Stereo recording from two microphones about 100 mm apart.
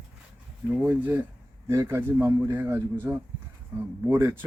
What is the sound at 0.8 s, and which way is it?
A man's voice, 20° right (ahead or behind).